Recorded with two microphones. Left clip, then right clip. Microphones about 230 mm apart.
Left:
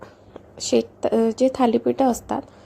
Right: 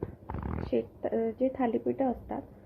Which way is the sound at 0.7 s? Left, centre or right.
Left.